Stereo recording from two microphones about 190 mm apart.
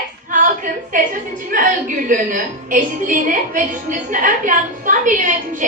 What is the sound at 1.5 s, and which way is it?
A woman's voice, 45° right (ahead or behind).